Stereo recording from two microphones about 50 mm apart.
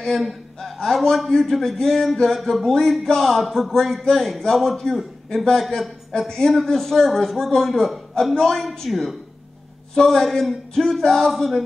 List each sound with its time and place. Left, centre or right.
0.2 s a man's voice: centre